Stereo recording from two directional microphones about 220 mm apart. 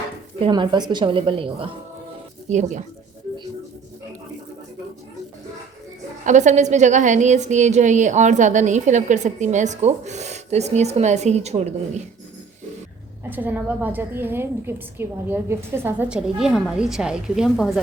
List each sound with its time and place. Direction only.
0.3 s a woman's voice: 20° right (ahead or behind)
6.2 s a woman's voice: 35° right (ahead or behind)
13.3 s a woman's voice: 10° right (ahead or behind)